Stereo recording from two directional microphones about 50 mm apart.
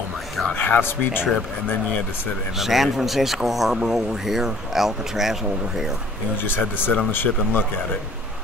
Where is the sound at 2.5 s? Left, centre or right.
Centre.